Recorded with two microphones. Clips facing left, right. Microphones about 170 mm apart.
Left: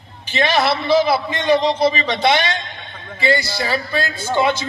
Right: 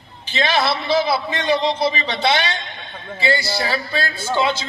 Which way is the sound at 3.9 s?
50° left (ahead or behind).